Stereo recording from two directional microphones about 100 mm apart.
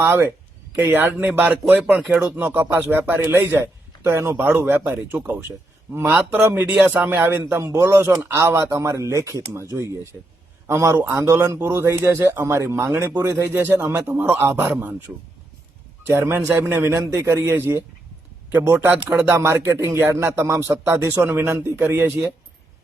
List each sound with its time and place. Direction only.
0.0 s speech: 20° right (ahead or behind)
8.1 s speech: 15° right (ahead or behind)
8.4 s speech: 25° right (ahead or behind)
16.0 s speech: 25° right (ahead or behind)